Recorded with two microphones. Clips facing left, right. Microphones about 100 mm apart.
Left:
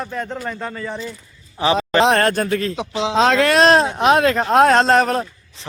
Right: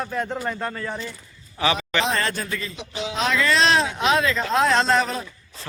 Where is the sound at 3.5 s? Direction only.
45° left (ahead or behind).